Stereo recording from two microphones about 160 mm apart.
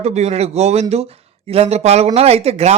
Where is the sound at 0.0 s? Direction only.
40° right (ahead or behind).